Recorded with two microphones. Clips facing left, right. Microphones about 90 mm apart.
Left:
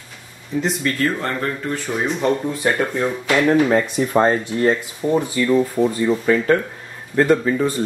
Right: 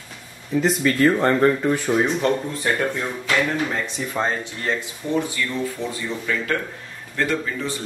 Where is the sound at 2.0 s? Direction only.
15° left (ahead or behind).